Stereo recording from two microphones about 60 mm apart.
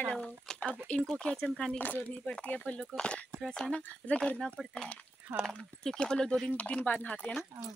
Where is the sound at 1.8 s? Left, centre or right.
Left; by 4.8 s centre.